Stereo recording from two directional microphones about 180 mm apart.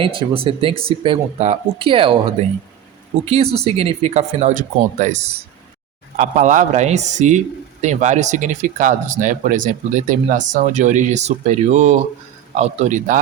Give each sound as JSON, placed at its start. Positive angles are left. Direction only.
{"t": 0.0, "sound": "speech", "side_deg": -30}